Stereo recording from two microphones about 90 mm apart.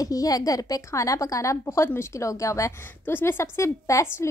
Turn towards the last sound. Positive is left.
turn(degrees=35)  # may be behind; listen again after turning